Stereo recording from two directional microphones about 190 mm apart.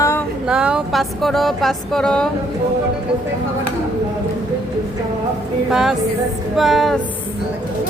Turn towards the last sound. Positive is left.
turn(degrees=0)  # may be behind; listen again after turning